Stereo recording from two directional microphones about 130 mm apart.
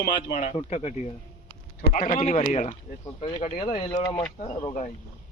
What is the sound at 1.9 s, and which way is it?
Speech, 85° left.